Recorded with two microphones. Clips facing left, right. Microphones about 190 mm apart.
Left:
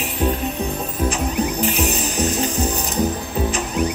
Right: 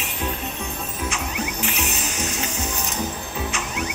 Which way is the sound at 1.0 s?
35° left (ahead or behind).